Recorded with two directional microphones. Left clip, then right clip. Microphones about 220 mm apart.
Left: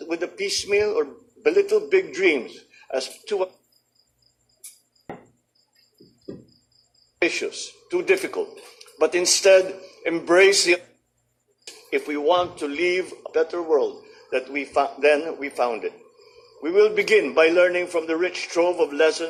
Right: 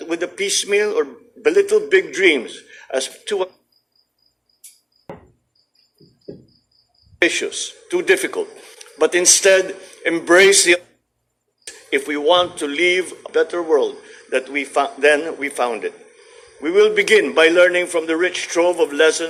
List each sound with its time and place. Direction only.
0.0 s speech: 40° right (ahead or behind)
7.2 s speech: 35° right (ahead or behind)
11.9 s speech: 35° right (ahead or behind)